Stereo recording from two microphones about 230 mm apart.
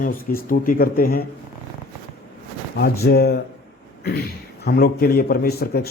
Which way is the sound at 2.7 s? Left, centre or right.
Left.